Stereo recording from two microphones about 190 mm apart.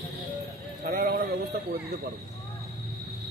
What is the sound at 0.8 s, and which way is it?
Speech, 50° right (ahead or behind).